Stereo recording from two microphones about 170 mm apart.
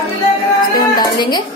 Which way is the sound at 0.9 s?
25° left (ahead or behind).